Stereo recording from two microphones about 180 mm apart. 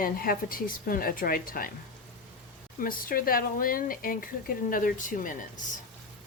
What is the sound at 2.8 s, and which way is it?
A woman's voice, 50° left (ahead or behind).